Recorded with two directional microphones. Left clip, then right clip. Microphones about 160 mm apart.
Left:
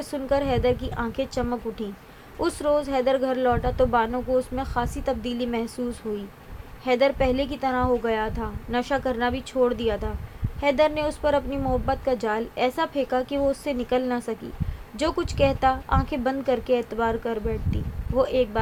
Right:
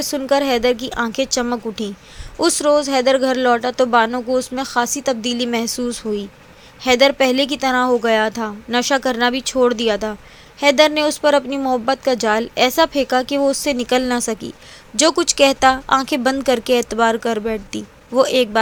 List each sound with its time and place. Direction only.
0.0 s speech: 35° right (ahead or behind)